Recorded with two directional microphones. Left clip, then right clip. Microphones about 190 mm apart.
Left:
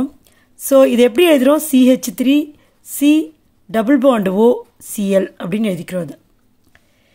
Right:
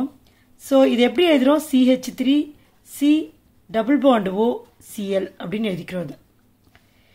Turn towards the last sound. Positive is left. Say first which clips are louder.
# left 6 dB
turn(degrees=35)  # may be behind; listen again after turning